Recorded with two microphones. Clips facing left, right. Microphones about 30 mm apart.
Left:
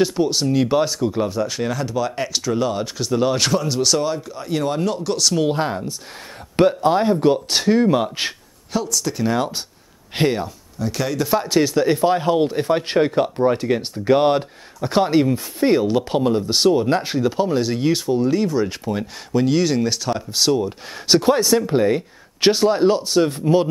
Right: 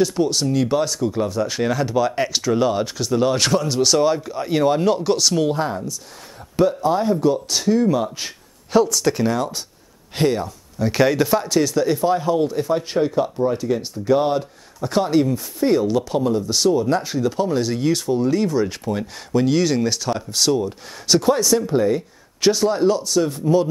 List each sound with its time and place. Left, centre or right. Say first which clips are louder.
0.1 s speech: left 1 dB; centre
1.5 s speech: right 3 dB; centre
5.5 s speech: left 1 dB; left
6.5 s speech: left 2 dB; left
8.8 s speech: right 4 dB; right
9.3 s speech: left 1 dB; left
10.8 s speech: right 5 dB; centre
11.4 s speech: left 1 dB; left
14.8 s speech: left 1 dB; left
17.3 s speech: even; centre
21.1 s speech: left 1 dB; left